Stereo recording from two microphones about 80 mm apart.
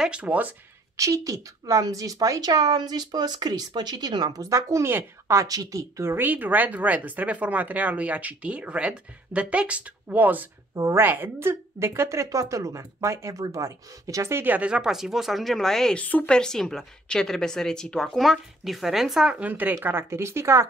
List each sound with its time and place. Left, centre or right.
0.0 s speech: centre
0.9 s a woman's voice: right
10.7 s speech: right
11.0 s a woman's voice: right
14.4 s speech: right
14.7 s a woman's voice: centre
16.0 s a woman's voice: centre
19.4 s a woman's voice: right